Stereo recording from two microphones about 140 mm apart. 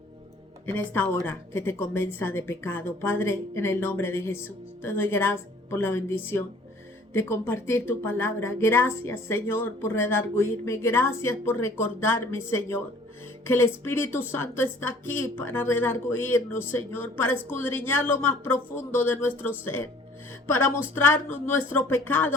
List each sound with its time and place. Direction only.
0.6 s a woman's voice: 15° left (ahead or behind)